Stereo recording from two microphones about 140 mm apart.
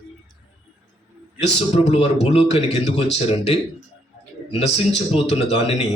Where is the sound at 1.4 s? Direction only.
50° left (ahead or behind).